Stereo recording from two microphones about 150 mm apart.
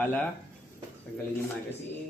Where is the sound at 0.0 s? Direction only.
10° left (ahead or behind).